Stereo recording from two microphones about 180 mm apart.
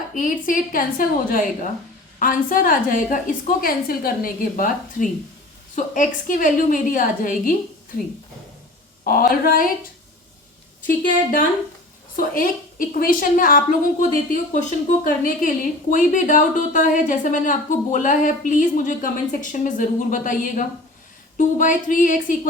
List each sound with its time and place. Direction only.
0.2 s a woman's voice: 50° left (ahead or behind)
9.0 s a woman's voice: 55° left (ahead or behind)
10.8 s a woman's voice: 50° left (ahead or behind)